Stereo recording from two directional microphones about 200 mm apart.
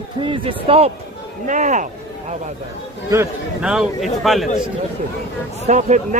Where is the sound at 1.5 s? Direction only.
40° right (ahead or behind).